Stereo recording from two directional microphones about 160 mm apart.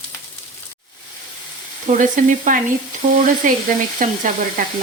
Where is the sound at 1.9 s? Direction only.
50° right (ahead or behind).